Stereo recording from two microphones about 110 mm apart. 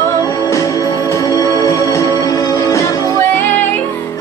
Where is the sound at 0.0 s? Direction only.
30° left (ahead or behind).